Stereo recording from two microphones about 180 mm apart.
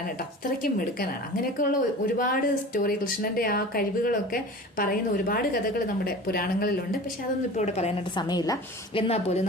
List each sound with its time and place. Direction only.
0.6 s speech: 55° left (ahead or behind)
7.6 s speech: 40° left (ahead or behind)
8.1 s a woman's voice: 25° left (ahead or behind)
9.0 s speech: 35° left (ahead or behind)